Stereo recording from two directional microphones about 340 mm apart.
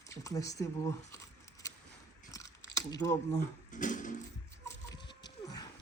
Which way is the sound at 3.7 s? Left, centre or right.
Left.